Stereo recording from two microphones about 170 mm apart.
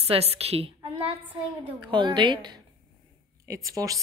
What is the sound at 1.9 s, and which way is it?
A woman's voice, 25° right (ahead or behind).